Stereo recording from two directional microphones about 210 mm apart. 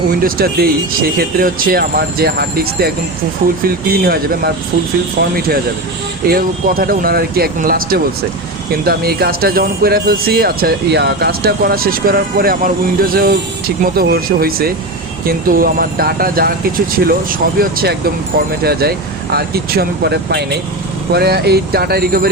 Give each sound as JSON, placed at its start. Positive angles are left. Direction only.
{"t": 0.2, "sound": "speech", "side_deg": -45}
{"t": 6.2, "sound": "speech", "side_deg": -45}
{"t": 17.6, "sound": "speech", "side_deg": -45}